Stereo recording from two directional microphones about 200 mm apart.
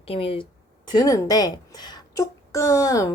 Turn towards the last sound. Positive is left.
turn(degrees=15)  # may be behind; listen again after turning